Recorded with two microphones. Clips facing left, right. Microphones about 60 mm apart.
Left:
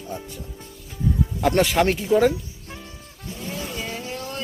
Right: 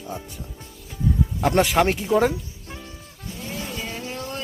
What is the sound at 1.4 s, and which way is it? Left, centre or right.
Speech, centre.